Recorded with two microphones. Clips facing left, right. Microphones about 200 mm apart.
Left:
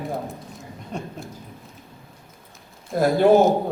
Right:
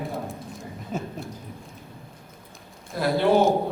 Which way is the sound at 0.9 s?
5° right (ahead or behind).